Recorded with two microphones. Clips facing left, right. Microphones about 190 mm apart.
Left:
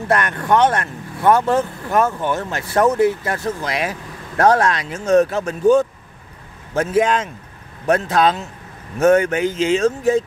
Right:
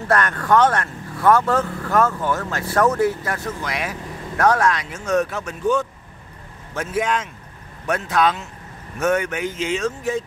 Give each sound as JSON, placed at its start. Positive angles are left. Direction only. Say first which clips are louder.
{"t": 0.1, "sound": "speech", "louder": "left 1 dB", "side_deg": 20}
{"t": 7.0, "sound": "speech", "louder": "left 4 dB", "side_deg": 30}